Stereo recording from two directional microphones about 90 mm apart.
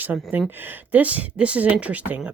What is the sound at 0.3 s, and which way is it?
Speech, 20° right (ahead or behind).